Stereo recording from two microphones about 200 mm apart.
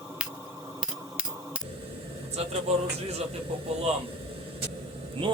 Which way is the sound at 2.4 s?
30° right (ahead or behind).